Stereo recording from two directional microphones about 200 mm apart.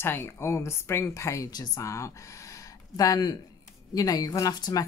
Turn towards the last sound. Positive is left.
turn(degrees=20)  # may be behind; listen again after turning